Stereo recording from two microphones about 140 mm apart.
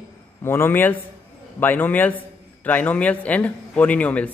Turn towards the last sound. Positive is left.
turn(degrees=10)  # may be behind; listen again after turning